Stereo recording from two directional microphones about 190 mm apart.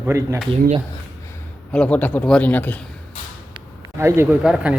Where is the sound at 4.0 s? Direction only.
15° right (ahead or behind).